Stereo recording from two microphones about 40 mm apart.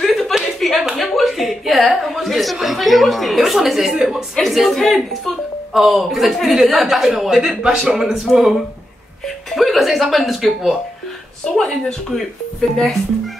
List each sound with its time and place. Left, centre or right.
0.0 s a sound: centre
0.9 s speech: centre
3.9 s a woman's voice: centre
4.4 s speech: centre
5.7 s a woman's voice: centre
12.5 s speech: centre